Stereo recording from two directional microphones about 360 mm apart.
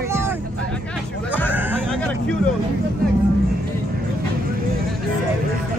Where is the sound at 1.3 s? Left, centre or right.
Centre.